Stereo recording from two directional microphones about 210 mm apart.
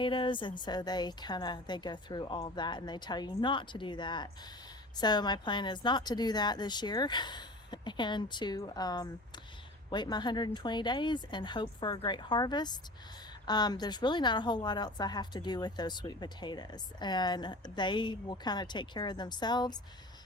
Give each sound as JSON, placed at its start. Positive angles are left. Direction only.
{"t": 0.0, "sound": "a woman's voice", "side_deg": 25}